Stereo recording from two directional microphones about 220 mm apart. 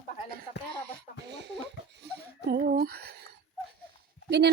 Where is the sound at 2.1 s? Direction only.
50° right (ahead or behind).